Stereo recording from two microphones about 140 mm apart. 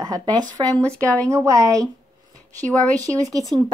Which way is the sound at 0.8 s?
10° left (ahead or behind).